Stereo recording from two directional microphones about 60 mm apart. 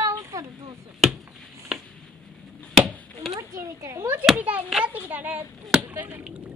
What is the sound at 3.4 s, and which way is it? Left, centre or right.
Speech, right.